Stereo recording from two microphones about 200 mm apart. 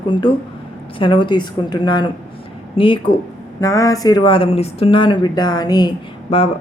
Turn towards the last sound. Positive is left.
turn(degrees=30)  # may be behind; listen again after turning